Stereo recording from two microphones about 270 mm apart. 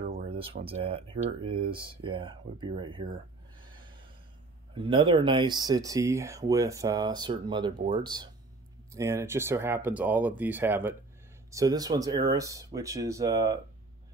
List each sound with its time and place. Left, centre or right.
0.0 s speech: right
4.7 s speech: centre